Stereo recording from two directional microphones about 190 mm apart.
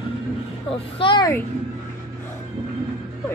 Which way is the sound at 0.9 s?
25° left (ahead or behind).